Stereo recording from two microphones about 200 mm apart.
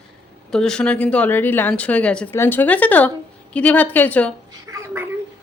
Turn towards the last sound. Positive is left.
turn(degrees=-15)  # may be behind; listen again after turning